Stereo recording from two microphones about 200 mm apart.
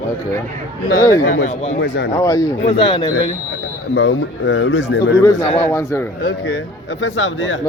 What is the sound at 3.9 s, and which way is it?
Speech, 60° left (ahead or behind).